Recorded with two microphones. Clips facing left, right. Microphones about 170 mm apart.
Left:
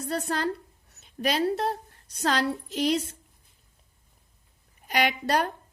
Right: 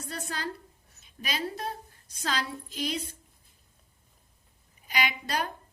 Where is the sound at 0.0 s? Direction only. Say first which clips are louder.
Left 8 dB; 65° left (ahead or behind).